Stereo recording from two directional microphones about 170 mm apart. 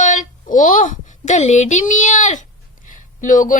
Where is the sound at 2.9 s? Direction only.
50° left (ahead or behind).